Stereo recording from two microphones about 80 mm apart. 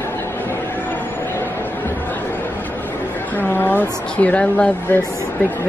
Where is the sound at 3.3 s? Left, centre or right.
Left.